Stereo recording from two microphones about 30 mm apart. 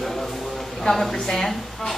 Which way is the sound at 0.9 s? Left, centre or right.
Left.